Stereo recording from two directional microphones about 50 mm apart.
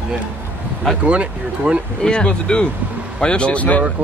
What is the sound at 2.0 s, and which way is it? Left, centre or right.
Speech, centre.